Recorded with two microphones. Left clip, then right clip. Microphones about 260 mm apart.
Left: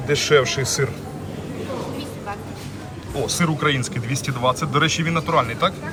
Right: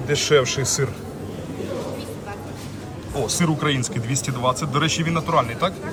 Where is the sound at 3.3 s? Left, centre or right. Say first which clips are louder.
Left 3 dB; centre.